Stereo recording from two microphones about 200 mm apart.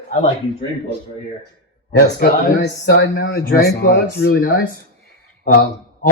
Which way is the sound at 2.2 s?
55° left (ahead or behind).